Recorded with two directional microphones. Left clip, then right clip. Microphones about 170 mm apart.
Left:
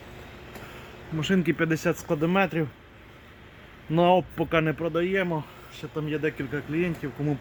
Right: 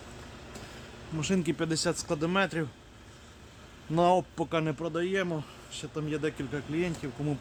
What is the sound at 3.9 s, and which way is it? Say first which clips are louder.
Speech: left 4 dB; 15° left (ahead or behind).